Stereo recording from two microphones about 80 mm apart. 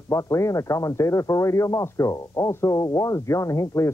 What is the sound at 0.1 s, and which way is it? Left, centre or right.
Speech, left.